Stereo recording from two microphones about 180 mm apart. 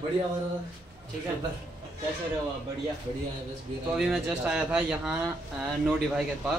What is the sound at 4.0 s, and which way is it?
Speech, 5° right (ahead or behind).